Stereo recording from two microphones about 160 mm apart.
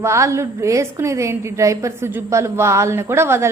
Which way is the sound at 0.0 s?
20° right (ahead or behind).